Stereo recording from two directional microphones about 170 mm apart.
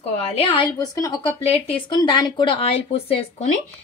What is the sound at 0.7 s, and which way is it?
Speech, 20° left (ahead or behind).